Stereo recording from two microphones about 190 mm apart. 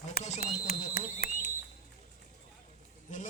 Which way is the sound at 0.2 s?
40° left (ahead or behind).